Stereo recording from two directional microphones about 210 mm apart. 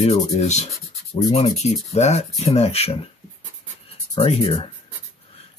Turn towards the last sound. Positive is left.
turn(degrees=25)  # may be behind; listen again after turning